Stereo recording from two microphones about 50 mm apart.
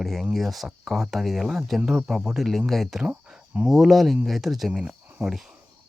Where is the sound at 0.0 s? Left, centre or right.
Centre.